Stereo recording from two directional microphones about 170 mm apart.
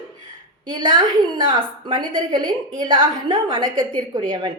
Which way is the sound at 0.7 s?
30° right (ahead or behind).